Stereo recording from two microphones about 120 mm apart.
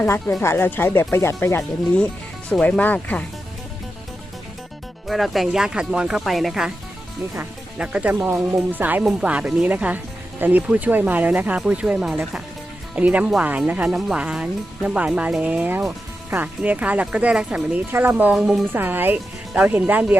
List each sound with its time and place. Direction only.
0.0 s speech: 15° left (ahead or behind)
5.0 s speech: centre (ahead or behind)
18.7 s speech: 15° right (ahead or behind)